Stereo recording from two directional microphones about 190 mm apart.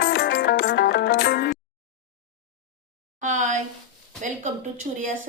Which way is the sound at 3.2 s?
40° right (ahead or behind).